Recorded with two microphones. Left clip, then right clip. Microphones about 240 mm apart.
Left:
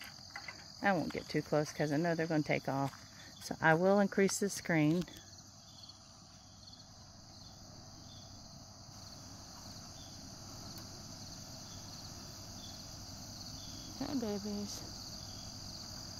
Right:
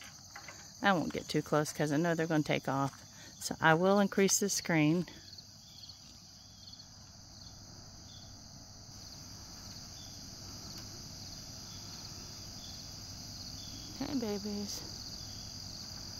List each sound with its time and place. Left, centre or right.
0.0 s cricket: left
0.7 s cricket: centre
1.1 s speech: centre
13.9 s cricket: centre